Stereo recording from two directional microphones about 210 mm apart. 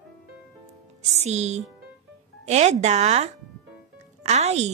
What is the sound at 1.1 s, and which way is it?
A woman's voice, 30° right (ahead or behind).